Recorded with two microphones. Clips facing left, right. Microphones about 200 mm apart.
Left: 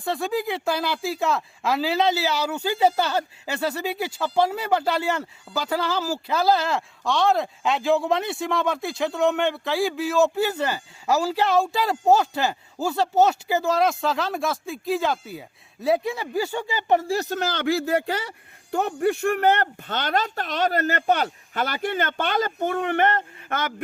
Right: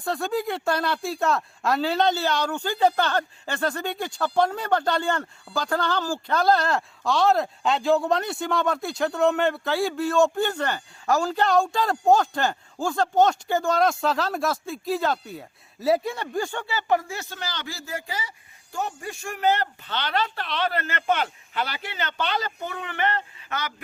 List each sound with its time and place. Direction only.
0.0 s speech: centre (ahead or behind)
17.0 s speech: 35° left (ahead or behind)